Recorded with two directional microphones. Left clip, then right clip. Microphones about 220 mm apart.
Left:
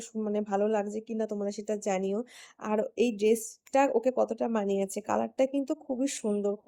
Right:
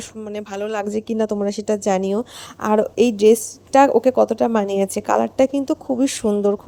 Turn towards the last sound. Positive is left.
turn(degrees=-35)  # may be behind; listen again after turning